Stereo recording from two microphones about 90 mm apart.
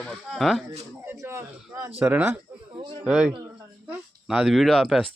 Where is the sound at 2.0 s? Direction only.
20° right (ahead or behind).